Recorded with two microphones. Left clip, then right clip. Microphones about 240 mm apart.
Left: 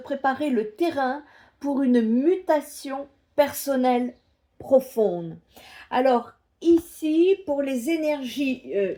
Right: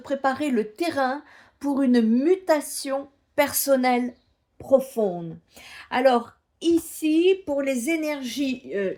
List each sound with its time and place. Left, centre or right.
0.0 s speech: right
5.0 s speech: centre
5.5 s speech: right